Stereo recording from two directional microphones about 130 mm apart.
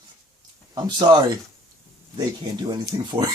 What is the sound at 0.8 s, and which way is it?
A man's voice, 35° right (ahead or behind).